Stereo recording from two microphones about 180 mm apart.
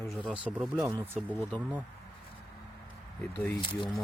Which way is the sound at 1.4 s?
10° left (ahead or behind).